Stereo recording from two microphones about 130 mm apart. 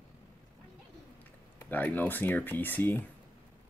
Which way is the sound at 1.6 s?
15° left (ahead or behind).